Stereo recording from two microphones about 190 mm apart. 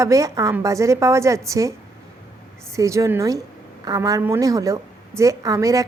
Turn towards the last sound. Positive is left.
turn(degrees=-15)  # may be behind; listen again after turning